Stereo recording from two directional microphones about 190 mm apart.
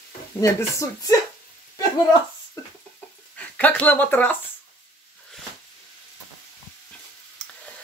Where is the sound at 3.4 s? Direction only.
10° left (ahead or behind).